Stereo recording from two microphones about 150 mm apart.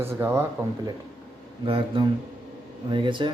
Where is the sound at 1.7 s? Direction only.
35° right (ahead or behind).